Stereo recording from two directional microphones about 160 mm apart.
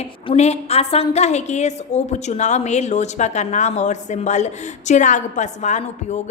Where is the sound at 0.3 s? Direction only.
40° left (ahead or behind).